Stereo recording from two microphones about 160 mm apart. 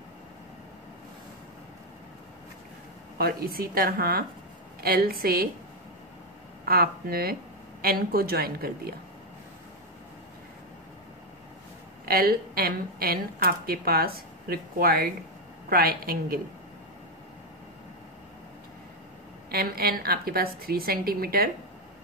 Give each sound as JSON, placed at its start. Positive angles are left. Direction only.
{"t": 3.2, "sound": "a woman's voice", "side_deg": -70}
{"t": 6.6, "sound": "a woman's voice", "side_deg": -70}
{"t": 12.1, "sound": "a woman's voice", "side_deg": -65}
{"t": 19.5, "sound": "a woman's voice", "side_deg": -70}